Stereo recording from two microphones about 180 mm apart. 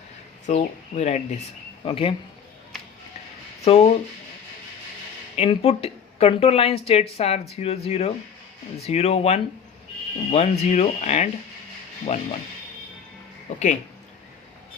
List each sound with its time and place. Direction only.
0.4 s speech: 40° left (ahead or behind)
3.6 s speech: 35° left (ahead or behind)
5.4 s speech: 35° left (ahead or behind)
13.5 s speech: 40° left (ahead or behind)